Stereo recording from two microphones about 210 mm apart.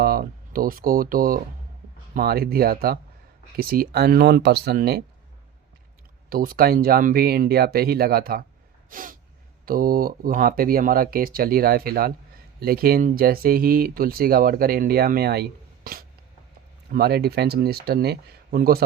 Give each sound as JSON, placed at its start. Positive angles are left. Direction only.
{"t": 0.0, "sound": "speech", "side_deg": -45}
{"t": 6.3, "sound": "speech", "side_deg": -45}
{"t": 8.9, "sound": "snort", "side_deg": -40}
{"t": 9.6, "sound": "speech", "side_deg": -45}